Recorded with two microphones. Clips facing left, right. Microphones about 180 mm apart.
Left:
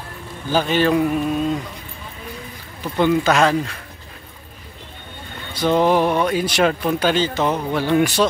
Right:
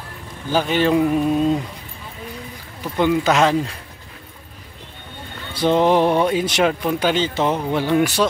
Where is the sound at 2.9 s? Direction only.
15° right (ahead or behind).